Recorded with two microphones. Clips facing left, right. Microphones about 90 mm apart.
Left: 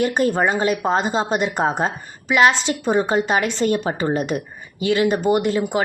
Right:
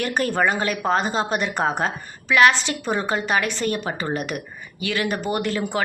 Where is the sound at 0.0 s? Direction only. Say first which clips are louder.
Left 3 dB; 20° left (ahead or behind).